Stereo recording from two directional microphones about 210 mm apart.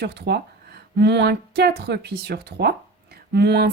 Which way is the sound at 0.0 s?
50° right (ahead or behind).